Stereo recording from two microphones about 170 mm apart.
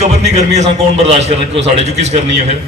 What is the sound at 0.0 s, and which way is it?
A man's voice, 40° right (ahead or behind).